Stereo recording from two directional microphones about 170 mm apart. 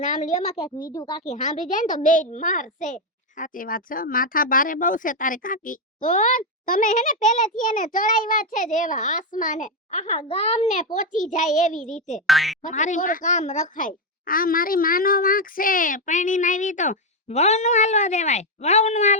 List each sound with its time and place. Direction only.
0.0 s a child's voice: 45° left (ahead or behind)
12.2 s speech: centre (ahead or behind)
12.6 s a child's voice: 45° left (ahead or behind)